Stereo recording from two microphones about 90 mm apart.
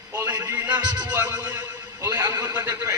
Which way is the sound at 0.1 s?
20° right (ahead or behind).